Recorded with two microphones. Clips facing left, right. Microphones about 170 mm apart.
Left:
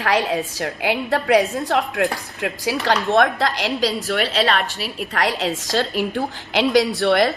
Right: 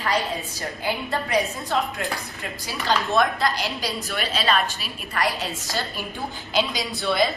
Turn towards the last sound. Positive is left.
turn(degrees=75)  # may be behind; listen again after turning